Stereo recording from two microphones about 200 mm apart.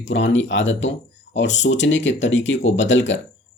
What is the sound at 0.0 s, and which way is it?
Speech, 65° left (ahead or behind).